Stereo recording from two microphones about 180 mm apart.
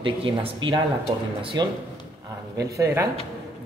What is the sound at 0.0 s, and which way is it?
Speech, 30° right (ahead or behind).